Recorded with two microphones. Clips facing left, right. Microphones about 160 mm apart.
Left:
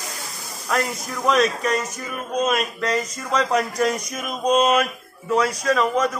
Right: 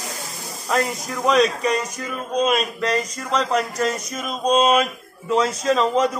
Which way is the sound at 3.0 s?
5° left (ahead or behind).